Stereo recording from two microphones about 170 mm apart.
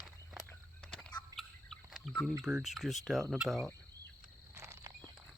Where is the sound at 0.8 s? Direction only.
5° left (ahead or behind).